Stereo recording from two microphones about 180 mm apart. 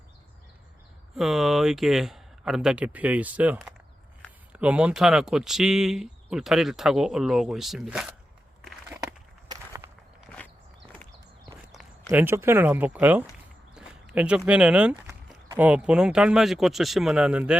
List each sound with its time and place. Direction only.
1.1 s speech: centre (ahead or behind)
8.6 s a sound: 10° right (ahead or behind)
9.5 s walk: 20° right (ahead or behind)
12.0 s speech: 10° right (ahead or behind)